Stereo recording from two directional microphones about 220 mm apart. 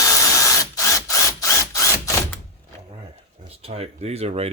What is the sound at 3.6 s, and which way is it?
Speech, 25° right (ahead or behind).